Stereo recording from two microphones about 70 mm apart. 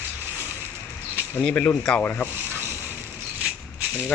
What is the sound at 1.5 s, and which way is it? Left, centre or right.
Speech, left.